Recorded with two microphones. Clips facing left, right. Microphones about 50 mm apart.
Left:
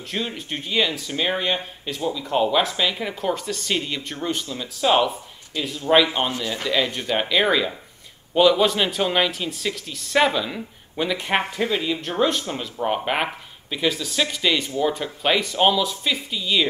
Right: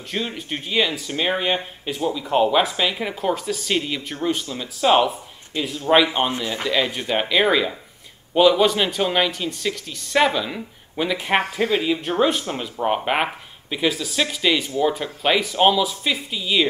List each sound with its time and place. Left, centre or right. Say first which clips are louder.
0.1 s speech: right 1 dB; centre
5.5 s speech: right 1 dB; right
6.6 s speech: right 1 dB; centre